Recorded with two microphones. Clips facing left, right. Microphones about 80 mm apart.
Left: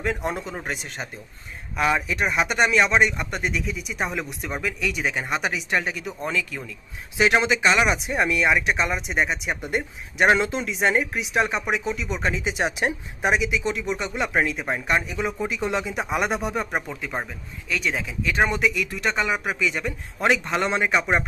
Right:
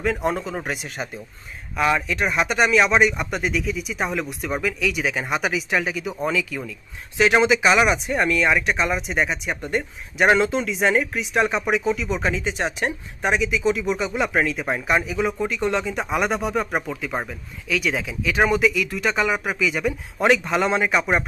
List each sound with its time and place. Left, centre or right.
0.0 s speech: centre